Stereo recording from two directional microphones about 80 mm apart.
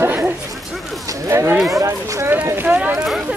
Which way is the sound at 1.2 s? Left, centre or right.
Right.